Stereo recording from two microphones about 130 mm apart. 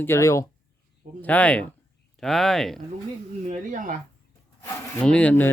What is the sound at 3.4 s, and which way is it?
Speech, 70° right (ahead or behind).